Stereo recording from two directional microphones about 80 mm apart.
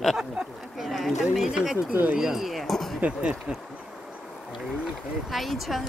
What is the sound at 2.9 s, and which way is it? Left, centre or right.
Speech, centre.